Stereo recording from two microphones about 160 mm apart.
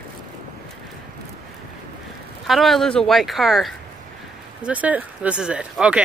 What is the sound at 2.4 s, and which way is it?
Speech, centre (ahead or behind).